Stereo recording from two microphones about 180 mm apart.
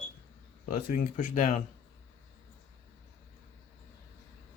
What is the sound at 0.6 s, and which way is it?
Speech, 50° left (ahead or behind).